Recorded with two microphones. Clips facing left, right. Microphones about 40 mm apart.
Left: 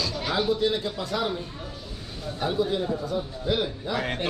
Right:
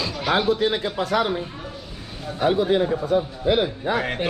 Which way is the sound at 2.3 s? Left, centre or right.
Right.